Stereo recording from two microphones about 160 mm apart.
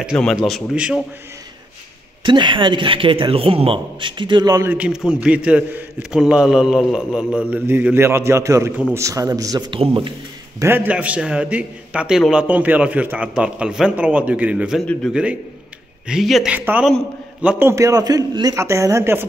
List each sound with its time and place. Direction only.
0.0 s a man's voice: centre (ahead or behind)
2.2 s a man's voice: 30° right (ahead or behind)
4.6 s a man's voice: 5° right (ahead or behind)
7.3 s a man's voice: 10° right (ahead or behind); by 10.1 s 35° right (ahead or behind)
10.6 s a man's voice: 15° right (ahead or behind)